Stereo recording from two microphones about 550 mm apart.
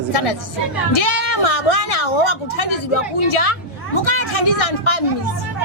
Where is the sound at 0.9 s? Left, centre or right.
Left.